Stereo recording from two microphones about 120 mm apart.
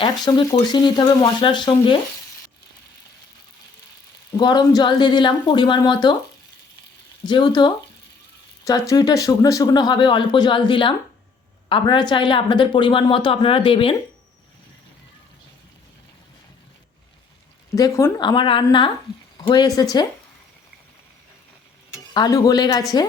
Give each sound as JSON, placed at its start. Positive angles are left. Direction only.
{"t": 0.3, "sound": "speech", "side_deg": 35}
{"t": 4.3, "sound": "speech", "side_deg": 35}
{"t": 7.3, "sound": "a woman's voice", "side_deg": 40}
{"t": 17.7, "sound": "speech", "side_deg": 25}
{"t": 18.2, "sound": "speech", "side_deg": 40}
{"t": 19.5, "sound": "speech", "side_deg": 35}
{"t": 22.1, "sound": "speech", "side_deg": 35}